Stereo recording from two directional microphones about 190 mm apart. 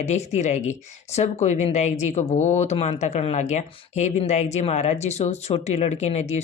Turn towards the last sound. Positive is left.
turn(degrees=35)  # may be behind; listen again after turning